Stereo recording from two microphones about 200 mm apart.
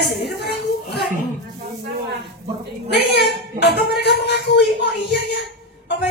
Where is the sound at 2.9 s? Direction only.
55° left (ahead or behind).